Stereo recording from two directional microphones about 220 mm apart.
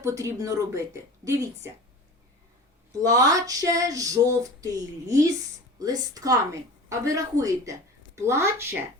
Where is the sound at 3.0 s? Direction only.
15° right (ahead or behind).